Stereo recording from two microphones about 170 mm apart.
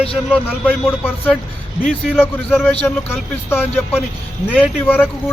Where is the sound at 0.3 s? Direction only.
10° left (ahead or behind).